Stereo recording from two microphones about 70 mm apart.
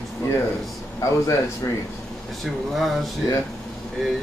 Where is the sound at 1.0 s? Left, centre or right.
Left.